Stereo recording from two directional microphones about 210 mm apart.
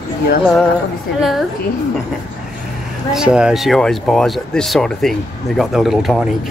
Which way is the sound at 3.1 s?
5° right (ahead or behind).